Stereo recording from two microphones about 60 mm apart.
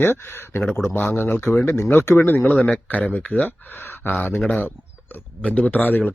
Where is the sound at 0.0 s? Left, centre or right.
Left.